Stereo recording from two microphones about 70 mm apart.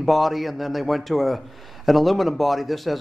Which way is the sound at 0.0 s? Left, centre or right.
Centre.